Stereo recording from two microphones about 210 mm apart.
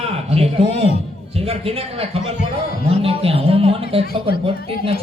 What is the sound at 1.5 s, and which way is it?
Speech, 30° right (ahead or behind).